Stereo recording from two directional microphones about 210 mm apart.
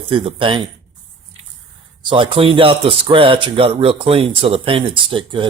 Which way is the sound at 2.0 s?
25° right (ahead or behind).